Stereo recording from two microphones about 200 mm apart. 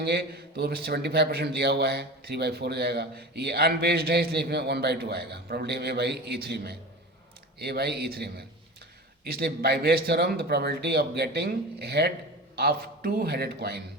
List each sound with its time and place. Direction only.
0.0 s a man's voice: 55° right (ahead or behind)